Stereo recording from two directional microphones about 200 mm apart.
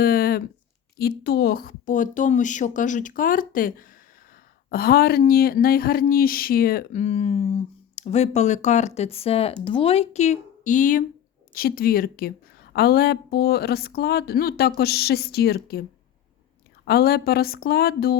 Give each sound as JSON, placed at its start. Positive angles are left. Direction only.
{"t": 0.0, "sound": "a sound", "side_deg": 50}
{"t": 0.9, "sound": "speech", "side_deg": 50}
{"t": 16.8, "sound": "speech", "side_deg": 55}